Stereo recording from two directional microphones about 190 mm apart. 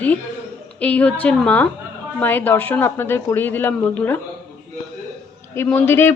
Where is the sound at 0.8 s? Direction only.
5° left (ahead or behind).